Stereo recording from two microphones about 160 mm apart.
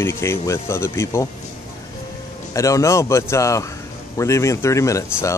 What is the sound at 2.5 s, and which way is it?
Speech, 20° left (ahead or behind).